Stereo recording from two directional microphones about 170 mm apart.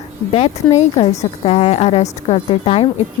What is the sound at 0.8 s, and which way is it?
A woman's voice, 35° left (ahead or behind).